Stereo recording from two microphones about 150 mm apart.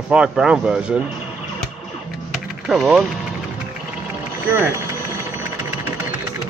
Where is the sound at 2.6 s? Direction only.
Centre (ahead or behind).